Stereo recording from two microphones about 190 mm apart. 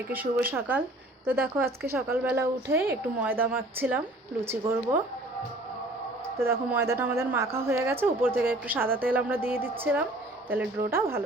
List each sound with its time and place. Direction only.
0.1 s a woman's voice: 10° right (ahead or behind)
2.7 s a woman's voice: 55° right (ahead or behind)
3.2 s a woman's voice: 10° right (ahead or behind)
6.4 s a woman's voice: 15° right (ahead or behind)